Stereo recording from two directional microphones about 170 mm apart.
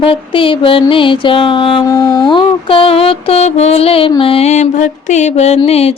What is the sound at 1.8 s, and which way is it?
Mantra, 20° left (ahead or behind).